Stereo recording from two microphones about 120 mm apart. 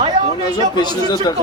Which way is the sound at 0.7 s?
35° left (ahead or behind).